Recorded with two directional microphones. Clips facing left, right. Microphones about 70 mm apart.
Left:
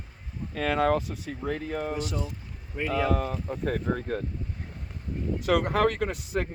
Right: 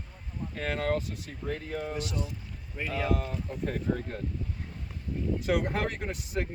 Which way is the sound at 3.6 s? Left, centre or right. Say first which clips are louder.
Left 2 dB; left.